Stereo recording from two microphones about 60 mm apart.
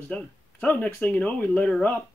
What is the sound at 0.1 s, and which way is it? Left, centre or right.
Speech, left.